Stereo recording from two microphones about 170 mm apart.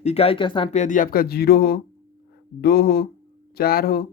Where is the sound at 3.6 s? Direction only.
65° left (ahead or behind).